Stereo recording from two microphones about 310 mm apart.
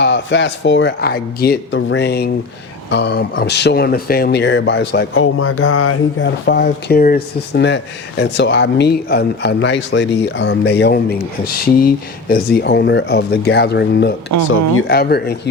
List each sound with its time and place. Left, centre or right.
0.0 s speech: left